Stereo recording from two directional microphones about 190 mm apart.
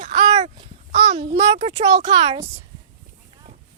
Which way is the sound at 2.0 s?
25° right (ahead or behind).